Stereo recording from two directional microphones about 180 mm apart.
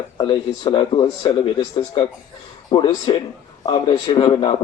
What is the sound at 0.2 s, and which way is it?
A man's voice, 30° left (ahead or behind).